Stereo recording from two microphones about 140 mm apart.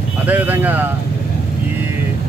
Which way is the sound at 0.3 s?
15° right (ahead or behind).